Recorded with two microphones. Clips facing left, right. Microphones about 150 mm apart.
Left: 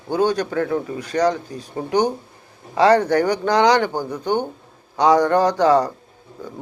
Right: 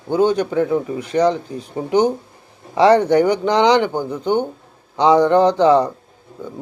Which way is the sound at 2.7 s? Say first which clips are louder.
Right 3 dB; 25° right (ahead or behind).